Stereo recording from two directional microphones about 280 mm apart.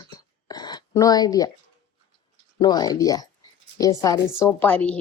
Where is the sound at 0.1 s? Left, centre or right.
Centre.